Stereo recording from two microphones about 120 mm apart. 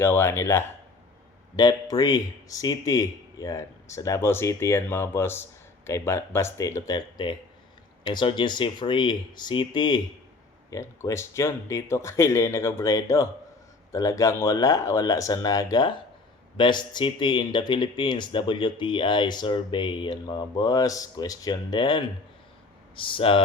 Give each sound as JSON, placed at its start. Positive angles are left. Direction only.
{"t": 0.0, "sound": "speech", "side_deg": 20}
{"t": 1.5, "sound": "speech", "side_deg": 30}
{"t": 10.7, "sound": "speech", "side_deg": 25}